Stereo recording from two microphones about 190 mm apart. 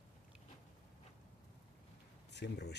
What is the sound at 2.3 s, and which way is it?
Speech, 65° left (ahead or behind).